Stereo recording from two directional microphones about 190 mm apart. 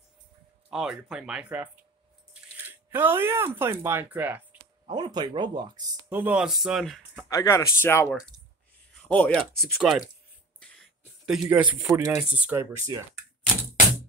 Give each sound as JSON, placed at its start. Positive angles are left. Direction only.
{"t": 0.7, "sound": "speech", "side_deg": -5}
{"t": 4.8, "sound": "speech", "side_deg": -25}
{"t": 6.1, "sound": "speech", "side_deg": -5}
{"t": 7.3, "sound": "speech", "side_deg": 15}
{"t": 9.8, "sound": "speech", "side_deg": -5}
{"t": 10.6, "sound": "a sound", "side_deg": 0}
{"t": 11.4, "sound": "speech", "side_deg": -10}